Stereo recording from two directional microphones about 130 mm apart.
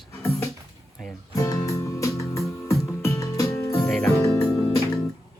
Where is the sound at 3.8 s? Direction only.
5° left (ahead or behind).